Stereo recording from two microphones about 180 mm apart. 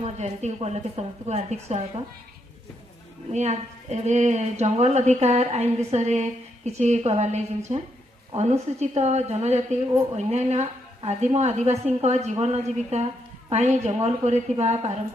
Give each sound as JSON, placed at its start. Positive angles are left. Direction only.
{"t": 0.0, "sound": "a woman's voice", "side_deg": -35}
{"t": 3.3, "sound": "a woman's voice", "side_deg": -40}